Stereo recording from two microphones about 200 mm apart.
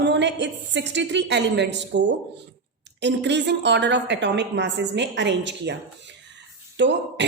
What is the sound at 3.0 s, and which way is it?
A woman's voice, 60° right (ahead or behind).